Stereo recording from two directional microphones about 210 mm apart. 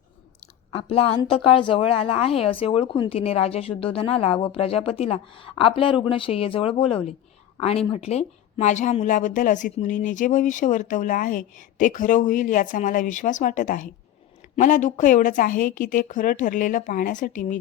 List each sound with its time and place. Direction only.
0.7 s a woman's voice: 25° left (ahead or behind)